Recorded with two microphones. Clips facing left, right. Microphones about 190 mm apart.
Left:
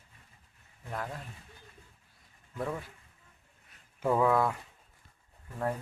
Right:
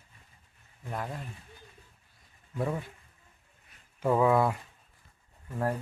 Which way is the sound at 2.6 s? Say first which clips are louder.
Right 3 dB; 10° right (ahead or behind).